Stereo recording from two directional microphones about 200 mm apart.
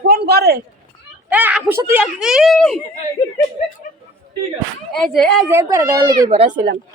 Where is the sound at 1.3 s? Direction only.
5° right (ahead or behind).